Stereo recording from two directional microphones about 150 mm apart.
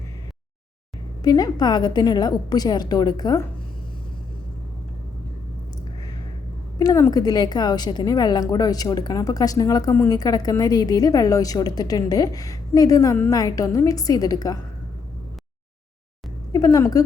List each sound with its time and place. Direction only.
1.2 s a woman's voice: 25° left (ahead or behind)
6.7 s a woman's voice: 20° left (ahead or behind)
16.5 s a woman's voice: 25° left (ahead or behind)